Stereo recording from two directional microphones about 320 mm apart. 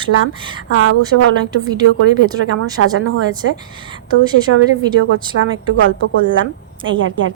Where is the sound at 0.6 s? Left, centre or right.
Right.